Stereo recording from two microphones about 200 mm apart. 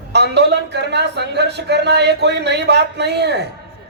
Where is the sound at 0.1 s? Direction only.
55° right (ahead or behind).